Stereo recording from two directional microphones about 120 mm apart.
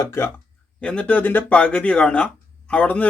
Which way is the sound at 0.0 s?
25° left (ahead or behind).